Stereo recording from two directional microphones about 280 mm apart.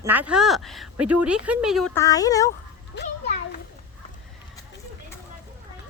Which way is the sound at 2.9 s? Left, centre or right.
Left.